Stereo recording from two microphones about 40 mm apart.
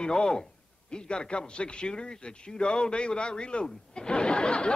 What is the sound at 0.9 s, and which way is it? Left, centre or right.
A man's voice, left.